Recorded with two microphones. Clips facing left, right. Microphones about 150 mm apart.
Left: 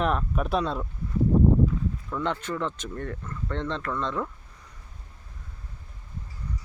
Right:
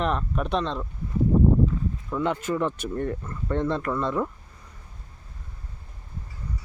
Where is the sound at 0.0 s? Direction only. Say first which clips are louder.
Even; centre (ahead or behind).